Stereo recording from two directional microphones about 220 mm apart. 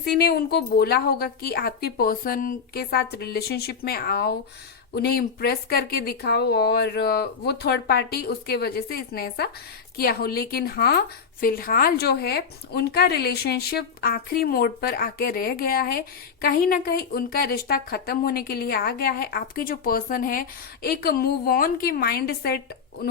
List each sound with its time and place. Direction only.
0.0 s a woman's voice: 45° left (ahead or behind)